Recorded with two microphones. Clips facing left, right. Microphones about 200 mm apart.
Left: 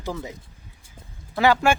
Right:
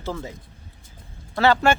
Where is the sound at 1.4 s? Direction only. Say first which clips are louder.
Right 1 dB; 10° left (ahead or behind).